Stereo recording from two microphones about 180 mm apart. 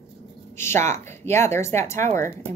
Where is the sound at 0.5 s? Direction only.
15° left (ahead or behind).